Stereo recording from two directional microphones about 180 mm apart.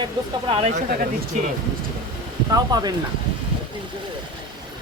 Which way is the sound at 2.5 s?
20° right (ahead or behind).